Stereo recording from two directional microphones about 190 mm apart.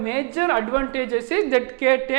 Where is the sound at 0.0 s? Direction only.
15° right (ahead or behind).